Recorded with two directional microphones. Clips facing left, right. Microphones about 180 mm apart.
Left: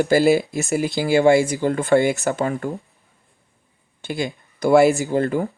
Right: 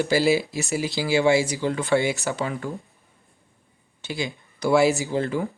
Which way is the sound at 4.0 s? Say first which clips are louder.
Left 4 dB; 50° left (ahead or behind).